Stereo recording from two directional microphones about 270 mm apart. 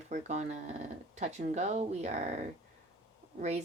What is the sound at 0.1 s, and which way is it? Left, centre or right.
Speech, right.